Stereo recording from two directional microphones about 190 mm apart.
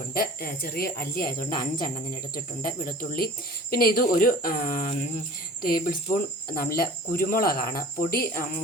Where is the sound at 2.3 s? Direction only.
50° left (ahead or behind).